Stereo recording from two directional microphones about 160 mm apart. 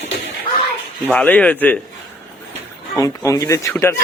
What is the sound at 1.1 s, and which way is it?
Speech, 5° left (ahead or behind).